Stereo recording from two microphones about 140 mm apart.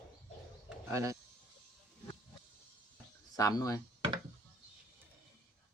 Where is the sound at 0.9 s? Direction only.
25° right (ahead or behind).